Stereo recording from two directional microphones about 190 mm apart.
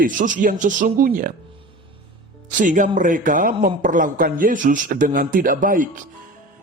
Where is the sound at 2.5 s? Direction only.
40° right (ahead or behind).